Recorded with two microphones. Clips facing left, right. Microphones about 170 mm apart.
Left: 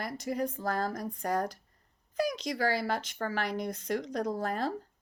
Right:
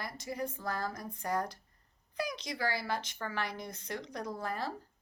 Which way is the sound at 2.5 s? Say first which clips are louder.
Left 3 dB; 50° left (ahead or behind).